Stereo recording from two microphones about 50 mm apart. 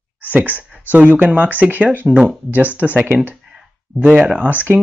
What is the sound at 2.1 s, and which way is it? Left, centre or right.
Speech, centre.